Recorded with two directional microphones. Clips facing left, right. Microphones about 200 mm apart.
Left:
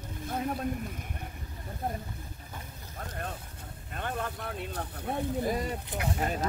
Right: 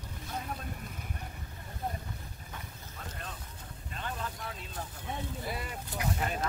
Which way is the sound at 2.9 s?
55° left (ahead or behind).